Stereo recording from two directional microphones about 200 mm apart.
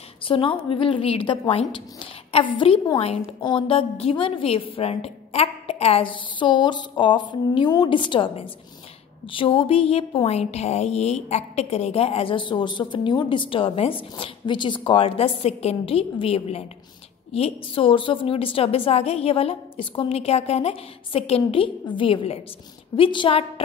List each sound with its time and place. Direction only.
0.2 s a woman's voice: 25° left (ahead or behind)